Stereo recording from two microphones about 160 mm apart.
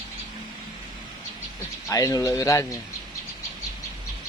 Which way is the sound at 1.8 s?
20° left (ahead or behind).